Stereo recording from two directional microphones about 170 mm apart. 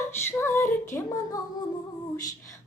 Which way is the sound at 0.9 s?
15° left (ahead or behind).